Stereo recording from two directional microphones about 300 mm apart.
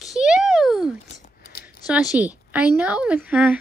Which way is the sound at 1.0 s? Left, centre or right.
Left.